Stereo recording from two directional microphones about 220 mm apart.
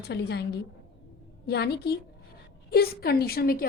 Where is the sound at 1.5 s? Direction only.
50° left (ahead or behind).